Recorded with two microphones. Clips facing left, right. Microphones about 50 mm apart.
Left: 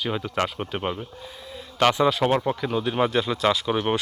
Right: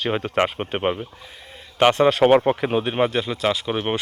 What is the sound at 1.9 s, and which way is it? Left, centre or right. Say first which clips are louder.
Speech: right 4 dB; right.